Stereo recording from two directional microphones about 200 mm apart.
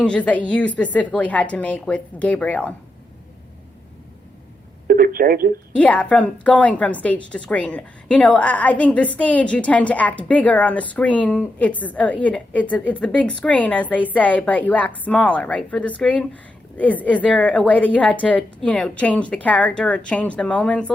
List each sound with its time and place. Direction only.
0.0 s a woman's voice: 5° left (ahead or behind)
4.9 s speech: 45° right (ahead or behind)
5.7 s a woman's voice: 5° left (ahead or behind)